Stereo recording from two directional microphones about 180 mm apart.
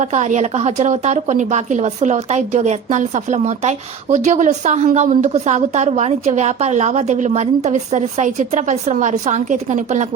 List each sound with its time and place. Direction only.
0.0 s a woman's voice: 40° right (ahead or behind)